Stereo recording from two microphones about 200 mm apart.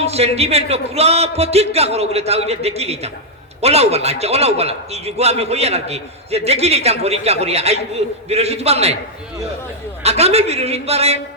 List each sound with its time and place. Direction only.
0.0 s a man's voice: 30° right (ahead or behind)
10.0 s a man's voice: 30° right (ahead or behind)